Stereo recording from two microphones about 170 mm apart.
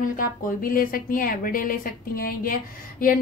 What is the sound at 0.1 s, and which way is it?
A woman's voice, 55° left (ahead or behind).